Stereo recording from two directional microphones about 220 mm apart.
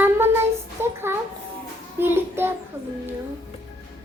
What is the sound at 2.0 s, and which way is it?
Child singing, 10° right (ahead or behind).